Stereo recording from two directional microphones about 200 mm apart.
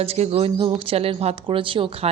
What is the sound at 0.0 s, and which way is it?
Speech, 30° right (ahead or behind).